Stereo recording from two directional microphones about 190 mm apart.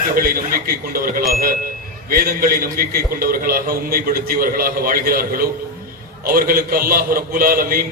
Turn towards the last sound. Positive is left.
turn(degrees=-50)  # may be behind; listen again after turning